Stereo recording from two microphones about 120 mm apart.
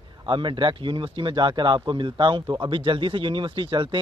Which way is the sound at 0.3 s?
40° right (ahead or behind).